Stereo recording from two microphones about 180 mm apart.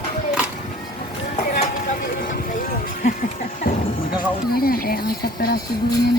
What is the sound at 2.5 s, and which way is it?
Music, 50° left (ahead or behind).